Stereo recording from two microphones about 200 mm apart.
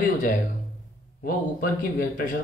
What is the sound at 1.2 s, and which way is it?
Speech, 45° left (ahead or behind).